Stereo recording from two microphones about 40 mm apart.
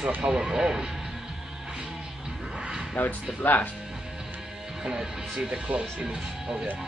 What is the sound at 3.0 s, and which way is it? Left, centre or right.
Speech, left.